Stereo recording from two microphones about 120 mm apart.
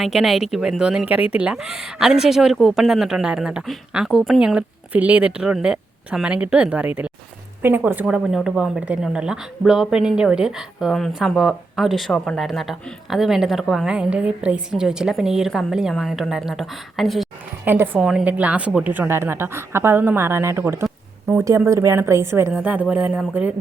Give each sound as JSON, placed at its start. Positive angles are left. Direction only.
{"t": 0.0, "sound": "a woman's voice", "side_deg": 0}
{"t": 17.7, "sound": "a woman's voice", "side_deg": -15}